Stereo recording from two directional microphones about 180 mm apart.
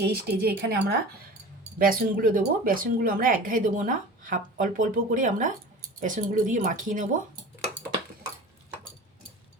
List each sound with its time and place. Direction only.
0.0 s speech: 65° right (ahead or behind)
1.8 s speech: 50° right (ahead or behind)